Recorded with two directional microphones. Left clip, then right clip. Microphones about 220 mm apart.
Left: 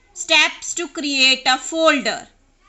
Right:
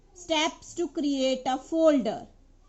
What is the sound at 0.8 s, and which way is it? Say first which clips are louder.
Speech: left 10 dB; 15° left (ahead or behind).